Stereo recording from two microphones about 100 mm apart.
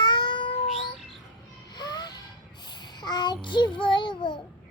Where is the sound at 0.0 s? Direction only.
50° left (ahead or behind).